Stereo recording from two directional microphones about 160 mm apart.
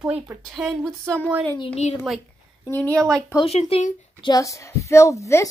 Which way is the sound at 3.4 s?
40° left (ahead or behind).